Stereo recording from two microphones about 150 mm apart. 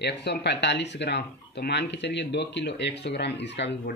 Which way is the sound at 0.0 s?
90° left.